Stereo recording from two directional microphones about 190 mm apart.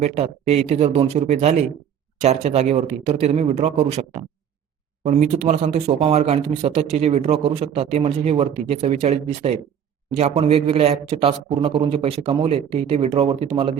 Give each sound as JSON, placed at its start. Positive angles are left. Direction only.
{"t": 0.0, "sound": "a man's voice", "side_deg": -35}